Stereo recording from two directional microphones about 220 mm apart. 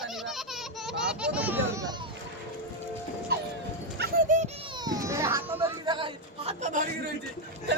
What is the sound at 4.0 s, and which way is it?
Music, 40° right (ahead or behind).